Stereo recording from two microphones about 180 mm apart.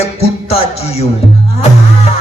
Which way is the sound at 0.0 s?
35° left (ahead or behind).